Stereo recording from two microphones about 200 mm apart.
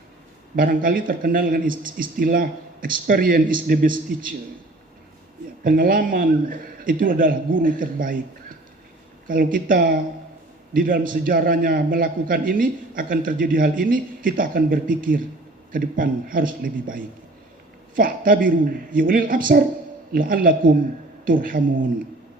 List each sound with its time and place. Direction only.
0.5 s a man's voice: 45° right (ahead or behind)
5.6 s a man's voice: 45° right (ahead or behind)